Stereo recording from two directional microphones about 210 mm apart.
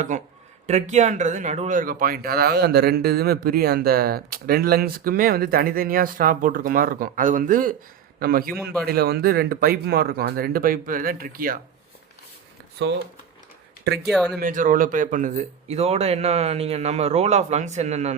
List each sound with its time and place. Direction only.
0.1 s speech: 35° right (ahead or behind)
13.8 s speech: 50° right (ahead or behind)
14.1 s speech: centre (ahead or behind)
14.3 s speech: 40° right (ahead or behind)